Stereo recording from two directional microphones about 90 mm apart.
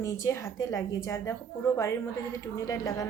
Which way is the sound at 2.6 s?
35° left (ahead or behind).